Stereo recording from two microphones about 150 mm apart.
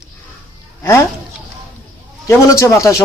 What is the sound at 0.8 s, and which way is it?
Speech, 15° left (ahead or behind).